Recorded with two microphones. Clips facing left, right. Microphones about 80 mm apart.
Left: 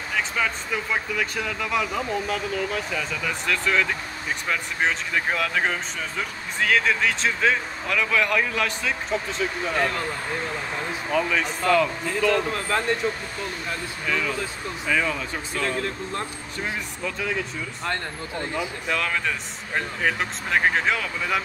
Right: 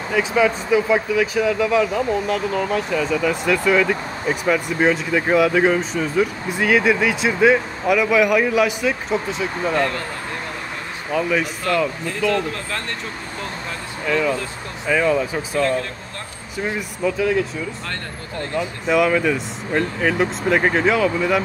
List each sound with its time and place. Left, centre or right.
0.1 s speech: centre
9.8 s speech: centre
11.1 s speech: centre
14.0 s speech: centre
15.6 s speech: centre
16.5 s speech: centre
18.4 s speech: centre
18.9 s speech: centre